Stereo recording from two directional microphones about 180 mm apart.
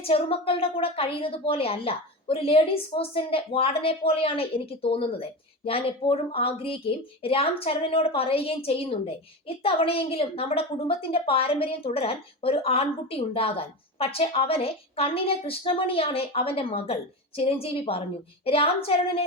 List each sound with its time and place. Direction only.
0.0 s a woman's voice: 30° left (ahead or behind)